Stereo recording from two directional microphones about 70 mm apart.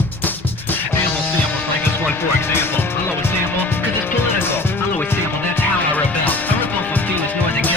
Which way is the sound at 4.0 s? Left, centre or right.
Left.